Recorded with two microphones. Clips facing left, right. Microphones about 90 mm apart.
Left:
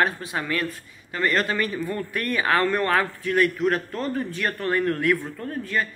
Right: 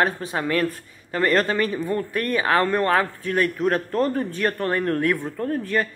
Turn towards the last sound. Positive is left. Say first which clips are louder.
# right 4 dB
turn(degrees=-40)  # may be behind; listen again after turning